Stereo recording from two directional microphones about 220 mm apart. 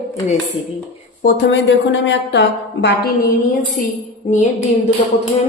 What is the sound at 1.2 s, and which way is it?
Speech, 50° left (ahead or behind).